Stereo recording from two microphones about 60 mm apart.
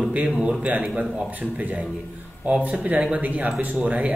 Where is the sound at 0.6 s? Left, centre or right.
Right.